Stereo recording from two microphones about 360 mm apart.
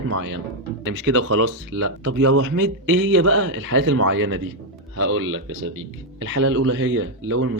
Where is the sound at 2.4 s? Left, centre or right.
Right.